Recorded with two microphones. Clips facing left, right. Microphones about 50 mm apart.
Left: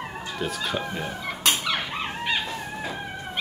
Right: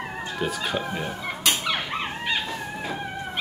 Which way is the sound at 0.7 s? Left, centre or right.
Centre.